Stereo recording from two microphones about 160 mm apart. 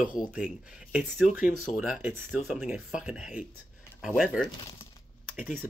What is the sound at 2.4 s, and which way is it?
Speech, centre (ahead or behind).